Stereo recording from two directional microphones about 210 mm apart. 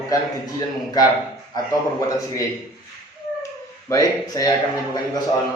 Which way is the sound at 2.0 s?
15° left (ahead or behind).